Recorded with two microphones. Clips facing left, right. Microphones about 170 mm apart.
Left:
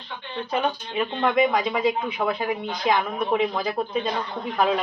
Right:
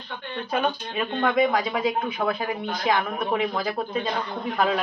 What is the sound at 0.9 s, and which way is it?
A woman's voice, centre (ahead or behind).